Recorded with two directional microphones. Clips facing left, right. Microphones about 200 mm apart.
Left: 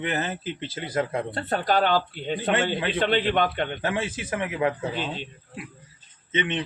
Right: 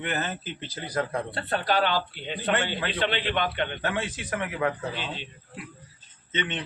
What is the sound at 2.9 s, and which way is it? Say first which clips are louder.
Speech: left 5 dB; 45° left (ahead or behind).